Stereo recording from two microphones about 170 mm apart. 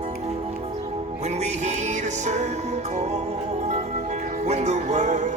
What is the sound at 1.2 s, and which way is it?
Music, 40° right (ahead or behind).